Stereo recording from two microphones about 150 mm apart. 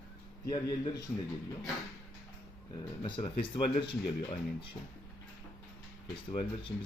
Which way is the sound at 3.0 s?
35° left (ahead or behind).